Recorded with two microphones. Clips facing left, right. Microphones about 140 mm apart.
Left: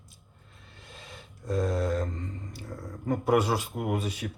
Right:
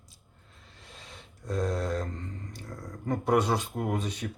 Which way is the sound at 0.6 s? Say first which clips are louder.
Left 2 dB; centre (ahead or behind).